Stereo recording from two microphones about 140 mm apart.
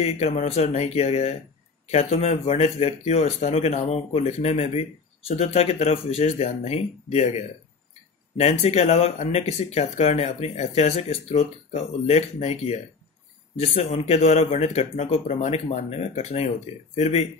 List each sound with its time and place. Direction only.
0.0 s speech: 50° left (ahead or behind)